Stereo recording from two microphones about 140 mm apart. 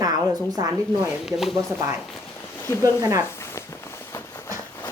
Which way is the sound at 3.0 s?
25° right (ahead or behind).